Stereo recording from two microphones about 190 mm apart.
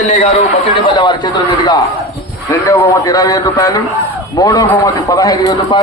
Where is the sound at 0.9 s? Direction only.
25° left (ahead or behind).